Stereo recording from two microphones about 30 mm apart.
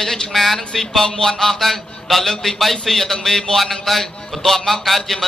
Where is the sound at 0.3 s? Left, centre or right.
Centre.